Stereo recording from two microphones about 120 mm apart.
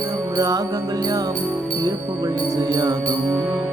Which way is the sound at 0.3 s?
30° right (ahead or behind).